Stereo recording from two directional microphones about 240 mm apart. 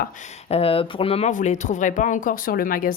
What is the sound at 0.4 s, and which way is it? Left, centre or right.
Speech, left.